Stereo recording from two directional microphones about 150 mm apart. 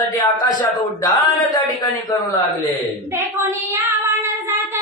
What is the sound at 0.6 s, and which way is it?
Speech, 25° left (ahead or behind).